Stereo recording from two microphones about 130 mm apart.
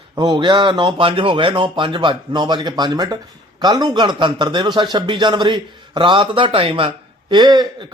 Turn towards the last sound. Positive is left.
turn(degrees=-35)  # may be behind; listen again after turning